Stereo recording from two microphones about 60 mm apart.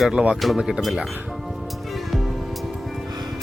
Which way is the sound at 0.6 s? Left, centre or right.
Centre.